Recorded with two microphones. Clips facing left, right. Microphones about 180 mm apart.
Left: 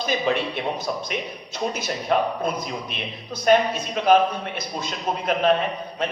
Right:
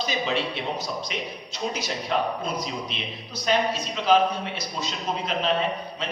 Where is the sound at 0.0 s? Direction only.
55° left (ahead or behind).